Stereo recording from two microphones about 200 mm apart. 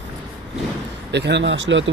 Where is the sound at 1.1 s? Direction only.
60° right (ahead or behind).